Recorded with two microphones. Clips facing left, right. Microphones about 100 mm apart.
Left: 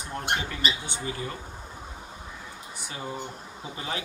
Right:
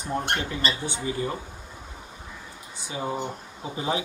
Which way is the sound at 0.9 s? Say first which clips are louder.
Right 5 dB; 20° right (ahead or behind).